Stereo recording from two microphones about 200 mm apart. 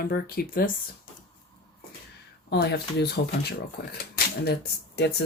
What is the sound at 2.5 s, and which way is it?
Speech, 55° left (ahead or behind).